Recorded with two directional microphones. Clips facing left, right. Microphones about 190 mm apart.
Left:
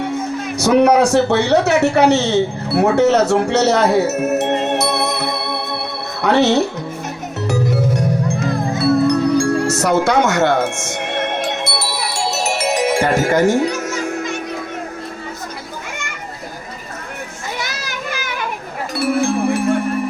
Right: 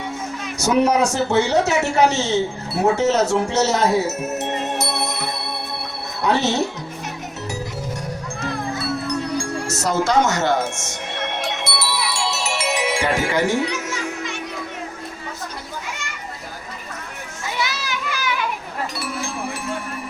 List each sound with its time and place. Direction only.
1.1 s speech: 60° left (ahead or behind)
9.0 s music: 60° left (ahead or behind); by 14.3 s 45° left (ahead or behind)
17.6 s children playing: 45° left (ahead or behind)
18.9 s music: 55° left (ahead or behind)